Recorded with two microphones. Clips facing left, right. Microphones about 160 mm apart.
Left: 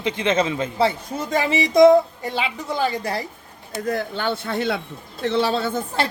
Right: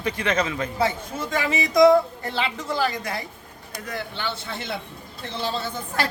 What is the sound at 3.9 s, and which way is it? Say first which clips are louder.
Speech: left 7 dB; 45° left (ahead or behind).